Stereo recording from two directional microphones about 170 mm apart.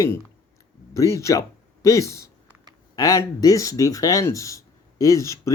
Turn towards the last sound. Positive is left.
turn(degrees=20)  # may be behind; listen again after turning